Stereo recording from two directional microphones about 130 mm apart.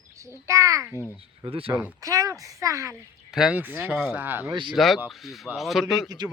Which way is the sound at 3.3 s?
10° right (ahead or behind).